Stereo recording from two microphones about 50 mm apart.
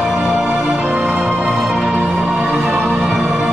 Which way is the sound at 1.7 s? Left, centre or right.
Centre.